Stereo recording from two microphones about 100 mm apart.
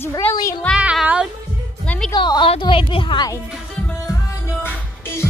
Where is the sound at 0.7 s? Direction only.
10° left (ahead or behind).